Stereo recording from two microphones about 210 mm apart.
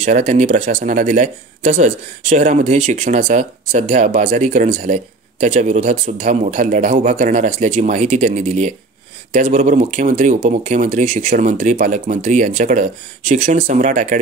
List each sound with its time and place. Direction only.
0.0 s speech: 35° right (ahead or behind)